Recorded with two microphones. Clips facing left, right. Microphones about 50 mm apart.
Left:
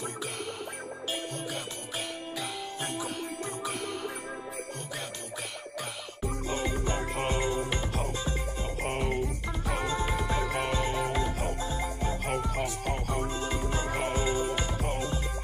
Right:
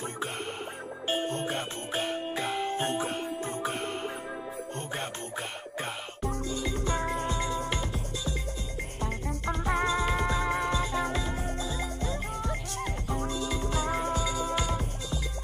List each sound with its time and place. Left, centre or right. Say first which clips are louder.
1.0 s music: right 6 dB; right
7.2 s music: left 2 dB; left
9.7 s music: right 3 dB; right
10.7 s music: even; left
13.3 s music: even; left